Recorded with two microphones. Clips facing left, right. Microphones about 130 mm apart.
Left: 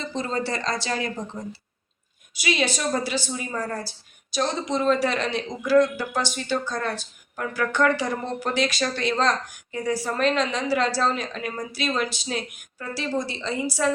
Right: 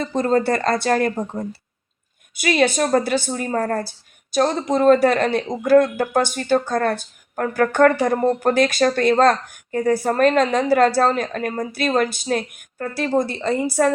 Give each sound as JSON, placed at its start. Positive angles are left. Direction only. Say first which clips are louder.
{"t": 0.0, "sound": "a woman's voice", "louder": "right 9 dB", "side_deg": -50}